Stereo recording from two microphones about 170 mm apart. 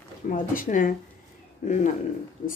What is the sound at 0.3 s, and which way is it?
Speech, 50° left (ahead or behind).